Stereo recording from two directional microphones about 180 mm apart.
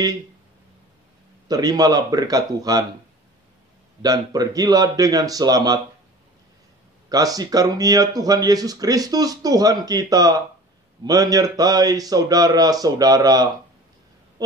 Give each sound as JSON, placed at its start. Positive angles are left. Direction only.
{"t": 1.5, "sound": "speech", "side_deg": -20}
{"t": 4.0, "sound": "speech", "side_deg": -20}
{"t": 7.1, "sound": "speech", "side_deg": -20}